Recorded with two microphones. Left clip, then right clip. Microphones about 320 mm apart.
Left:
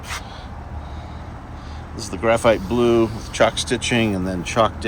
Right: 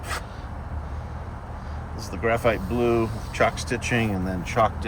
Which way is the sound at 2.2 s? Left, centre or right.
Centre.